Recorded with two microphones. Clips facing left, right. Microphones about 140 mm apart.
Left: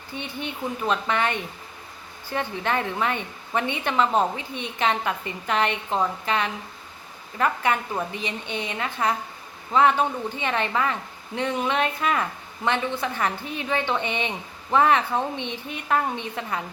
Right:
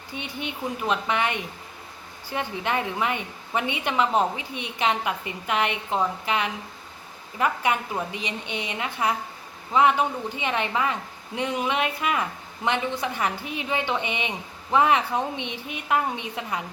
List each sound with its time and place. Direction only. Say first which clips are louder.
0.1 s a woman's voice: left 1 dB; 15° right (ahead or behind)
10.3 s a woman's voice: even; 15° right (ahead or behind)